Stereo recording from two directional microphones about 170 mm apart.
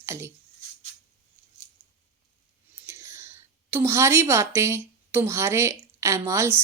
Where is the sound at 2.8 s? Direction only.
15° right (ahead or behind).